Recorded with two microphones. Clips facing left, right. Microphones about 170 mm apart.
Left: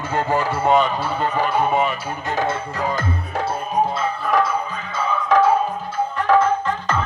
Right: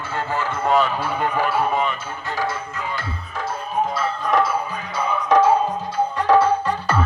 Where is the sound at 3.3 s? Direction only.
65° left (ahead or behind).